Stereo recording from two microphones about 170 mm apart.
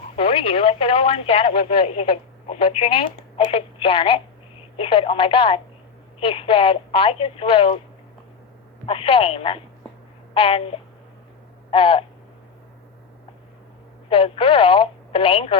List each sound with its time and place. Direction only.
0.2 s speech: 35° left (ahead or behind)
8.9 s speech: 35° left (ahead or behind)
14.1 s speech: 35° left (ahead or behind)